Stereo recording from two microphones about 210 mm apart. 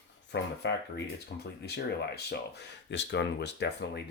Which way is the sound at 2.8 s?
55° left (ahead or behind).